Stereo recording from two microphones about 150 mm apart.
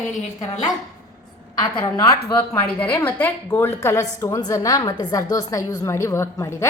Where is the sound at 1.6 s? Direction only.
25° left (ahead or behind).